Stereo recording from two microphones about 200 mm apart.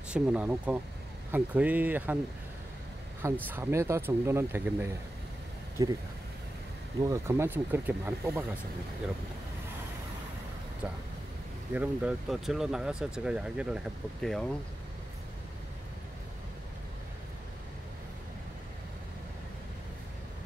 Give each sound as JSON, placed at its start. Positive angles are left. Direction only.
{"t": 0.1, "sound": "speech", "side_deg": -5}
{"t": 3.4, "sound": "speech", "side_deg": -10}
{"t": 7.0, "sound": "speech", "side_deg": -15}
{"t": 11.7, "sound": "speech", "side_deg": -5}